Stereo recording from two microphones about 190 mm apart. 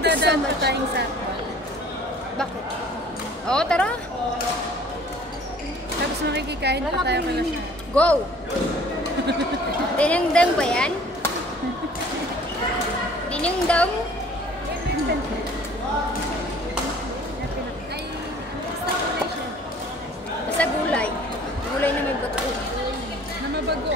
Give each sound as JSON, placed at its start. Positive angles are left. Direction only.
{"t": 0.0, "sound": "speech", "side_deg": -65}
{"t": 3.4, "sound": "speech", "side_deg": 5}
{"t": 6.3, "sound": "speech", "side_deg": -60}
{"t": 7.9, "sound": "speech", "side_deg": 5}
{"t": 9.9, "sound": "speech", "side_deg": 5}
{"t": 13.3, "sound": "a woman's voice", "side_deg": 5}
{"t": 20.5, "sound": "a woman's voice", "side_deg": 5}